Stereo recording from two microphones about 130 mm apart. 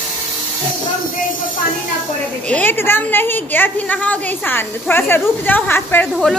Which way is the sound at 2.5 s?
15° left (ahead or behind).